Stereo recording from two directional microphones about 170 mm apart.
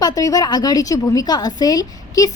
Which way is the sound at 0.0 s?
20° left (ahead or behind).